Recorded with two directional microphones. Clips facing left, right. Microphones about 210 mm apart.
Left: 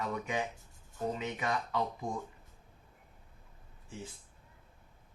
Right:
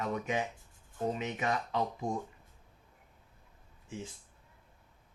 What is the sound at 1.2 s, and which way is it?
Mantra, 20° right (ahead or behind).